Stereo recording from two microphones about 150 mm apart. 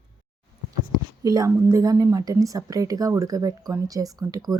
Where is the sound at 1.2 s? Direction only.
25° right (ahead or behind).